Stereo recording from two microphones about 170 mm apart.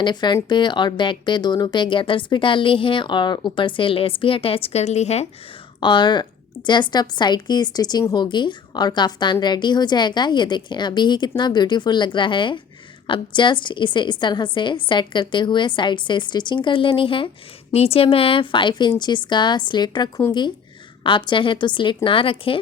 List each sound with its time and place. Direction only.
0.0 s speech: 25° left (ahead or behind)
5.8 s a woman's voice: 25° left (ahead or behind)